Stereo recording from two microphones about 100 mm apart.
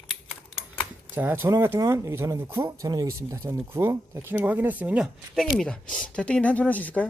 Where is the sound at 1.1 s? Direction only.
20° right (ahead or behind).